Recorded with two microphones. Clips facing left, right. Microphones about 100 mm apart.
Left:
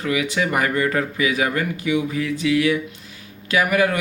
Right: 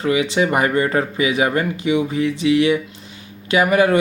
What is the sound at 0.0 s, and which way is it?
Speech, 25° right (ahead or behind).